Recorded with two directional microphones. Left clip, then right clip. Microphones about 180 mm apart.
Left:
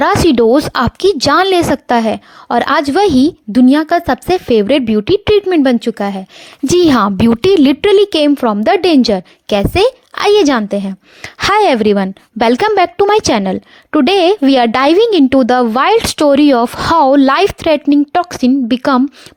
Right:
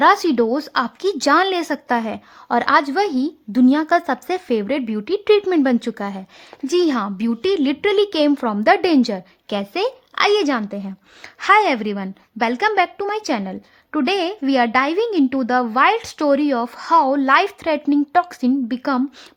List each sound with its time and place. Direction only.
0.0 s a woman's voice: 35° left (ahead or behind)
6.7 s a woman's voice: 45° left (ahead or behind)